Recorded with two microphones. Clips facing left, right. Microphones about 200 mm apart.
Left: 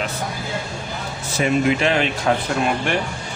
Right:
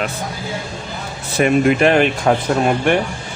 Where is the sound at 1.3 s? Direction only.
55° right (ahead or behind).